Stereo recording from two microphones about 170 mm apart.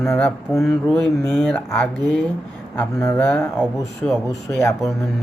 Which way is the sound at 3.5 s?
Centre (ahead or behind).